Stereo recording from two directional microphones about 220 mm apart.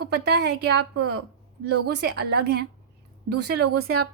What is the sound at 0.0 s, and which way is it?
A woman's voice, 50° right (ahead or behind).